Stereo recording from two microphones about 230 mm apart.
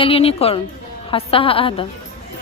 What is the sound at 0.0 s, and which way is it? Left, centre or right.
A woman's voice, left.